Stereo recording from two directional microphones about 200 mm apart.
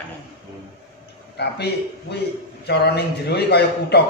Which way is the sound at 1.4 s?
55° left (ahead or behind).